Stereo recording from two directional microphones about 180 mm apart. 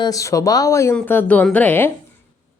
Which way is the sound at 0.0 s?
20° left (ahead or behind).